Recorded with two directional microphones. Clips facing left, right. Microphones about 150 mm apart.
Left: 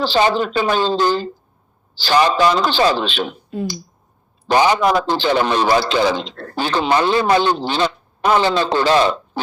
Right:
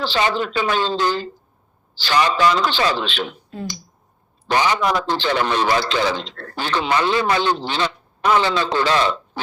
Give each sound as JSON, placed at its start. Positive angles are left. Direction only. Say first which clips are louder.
{"t": 0.0, "sound": "a man's voice", "louder": "left 4 dB", "side_deg": 35}
{"t": 4.4, "sound": "a man's voice", "louder": "left 4 dB", "side_deg": 35}